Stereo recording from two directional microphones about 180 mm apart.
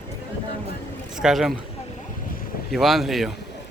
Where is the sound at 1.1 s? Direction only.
5° right (ahead or behind).